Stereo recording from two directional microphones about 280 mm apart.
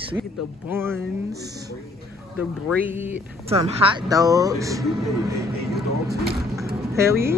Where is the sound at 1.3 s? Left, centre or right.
Right.